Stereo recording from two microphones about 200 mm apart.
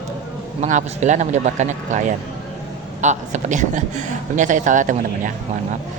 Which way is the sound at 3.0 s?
35° right (ahead or behind).